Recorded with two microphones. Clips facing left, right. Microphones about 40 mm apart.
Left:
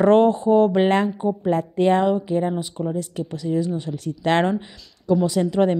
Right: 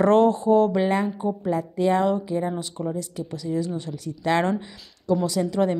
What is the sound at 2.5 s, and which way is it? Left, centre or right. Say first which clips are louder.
Speech: left 3 dB; centre.